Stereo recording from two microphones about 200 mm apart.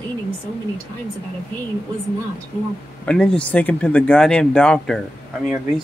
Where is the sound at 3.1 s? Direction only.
5° left (ahead or behind).